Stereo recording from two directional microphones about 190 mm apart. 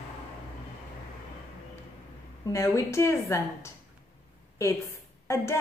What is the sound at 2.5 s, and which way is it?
A woman's voice, 15° left (ahead or behind).